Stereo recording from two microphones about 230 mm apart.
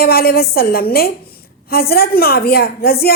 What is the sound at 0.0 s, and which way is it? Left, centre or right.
A woman's voice, left.